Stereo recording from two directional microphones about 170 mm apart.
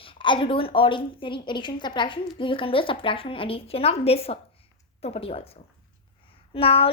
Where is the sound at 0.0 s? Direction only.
30° left (ahead or behind).